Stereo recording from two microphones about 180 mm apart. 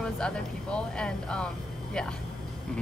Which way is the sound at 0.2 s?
5° left (ahead or behind).